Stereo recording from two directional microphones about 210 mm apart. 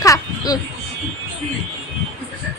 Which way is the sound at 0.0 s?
15° left (ahead or behind).